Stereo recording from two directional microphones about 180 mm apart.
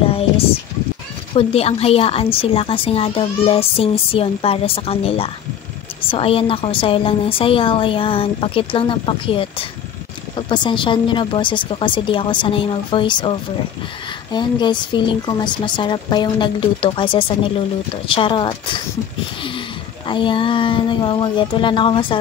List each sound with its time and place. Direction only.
0.0 s a sound: 30° left (ahead or behind)
1.3 s a woman's voice: 35° left (ahead or behind)
20.1 s a woman's voice: 25° left (ahead or behind)